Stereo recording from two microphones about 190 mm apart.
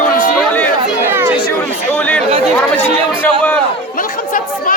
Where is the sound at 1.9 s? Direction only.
10° left (ahead or behind).